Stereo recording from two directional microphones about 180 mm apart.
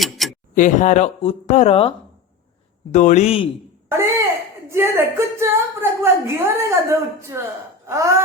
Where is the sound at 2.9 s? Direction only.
40° left (ahead or behind).